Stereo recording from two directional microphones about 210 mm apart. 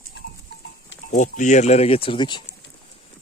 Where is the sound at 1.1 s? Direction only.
35° left (ahead or behind).